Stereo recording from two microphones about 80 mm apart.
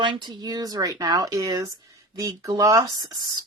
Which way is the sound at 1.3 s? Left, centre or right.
Right.